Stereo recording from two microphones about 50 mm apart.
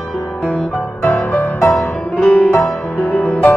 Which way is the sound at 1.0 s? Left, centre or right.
Left.